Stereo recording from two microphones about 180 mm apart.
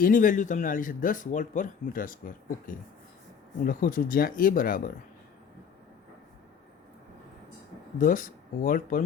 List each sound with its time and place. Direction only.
0.0 s a man's voice: 50° left (ahead or behind)
7.9 s a man's voice: 50° left (ahead or behind)